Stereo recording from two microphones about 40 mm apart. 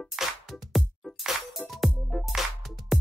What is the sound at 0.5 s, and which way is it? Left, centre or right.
Music, centre.